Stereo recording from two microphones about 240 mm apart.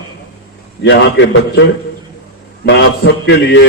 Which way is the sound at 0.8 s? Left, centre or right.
Left.